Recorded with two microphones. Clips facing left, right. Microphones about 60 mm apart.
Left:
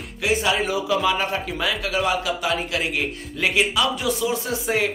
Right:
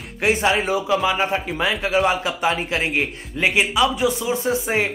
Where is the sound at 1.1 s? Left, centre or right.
Right.